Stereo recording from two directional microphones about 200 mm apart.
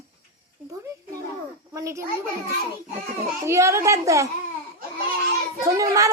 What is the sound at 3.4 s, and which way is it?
Speech, 15° right (ahead or behind).